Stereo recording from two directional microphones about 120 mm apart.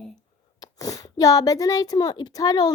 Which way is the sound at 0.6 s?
30° left (ahead or behind).